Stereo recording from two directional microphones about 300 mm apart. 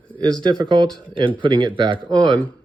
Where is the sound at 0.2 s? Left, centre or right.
Centre.